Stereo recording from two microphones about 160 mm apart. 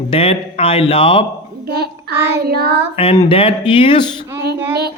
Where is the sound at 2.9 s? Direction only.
40° left (ahead or behind).